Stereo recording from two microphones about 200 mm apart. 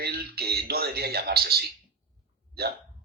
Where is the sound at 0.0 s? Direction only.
50° right (ahead or behind).